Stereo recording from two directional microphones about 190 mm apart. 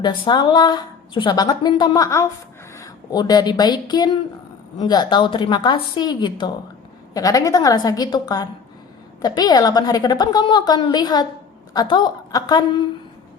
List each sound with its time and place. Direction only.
0.0 s a woman's voice: 25° left (ahead or behind)